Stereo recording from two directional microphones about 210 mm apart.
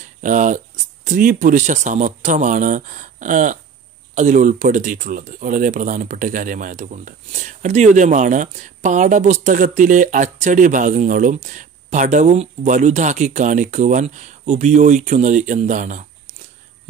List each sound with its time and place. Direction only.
0.2 s speech: 35° right (ahead or behind)